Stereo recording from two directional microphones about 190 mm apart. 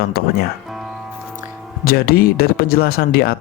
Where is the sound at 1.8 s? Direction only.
50° left (ahead or behind).